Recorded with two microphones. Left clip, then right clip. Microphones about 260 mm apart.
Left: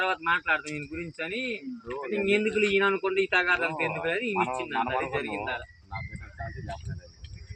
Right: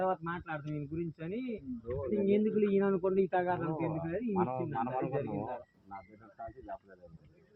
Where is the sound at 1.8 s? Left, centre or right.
Left.